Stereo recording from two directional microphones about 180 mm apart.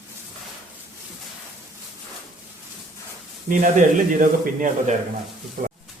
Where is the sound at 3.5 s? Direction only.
45° right (ahead or behind).